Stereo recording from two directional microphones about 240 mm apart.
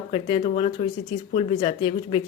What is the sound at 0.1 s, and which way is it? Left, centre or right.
A woman's voice, left.